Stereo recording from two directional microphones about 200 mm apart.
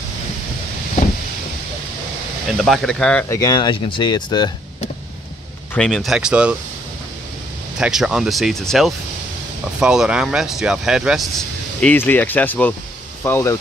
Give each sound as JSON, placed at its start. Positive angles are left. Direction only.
{"t": 2.5, "sound": "speech", "side_deg": 0}
{"t": 3.4, "sound": "speech", "side_deg": 20}
{"t": 5.8, "sound": "speech", "side_deg": 0}
{"t": 7.8, "sound": "speech", "side_deg": -5}